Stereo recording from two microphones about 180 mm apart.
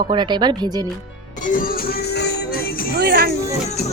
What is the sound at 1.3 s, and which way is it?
Music, 45° left (ahead or behind).